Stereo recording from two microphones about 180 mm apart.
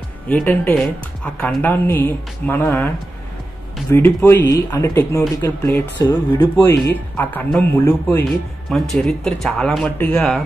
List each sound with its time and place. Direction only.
0.3 s a woman's voice: 10° left (ahead or behind)
3.9 s a woman's voice: 10° left (ahead or behind)
6.0 s speech: 25° left (ahead or behind)
6.6 s a woman's voice: 10° left (ahead or behind)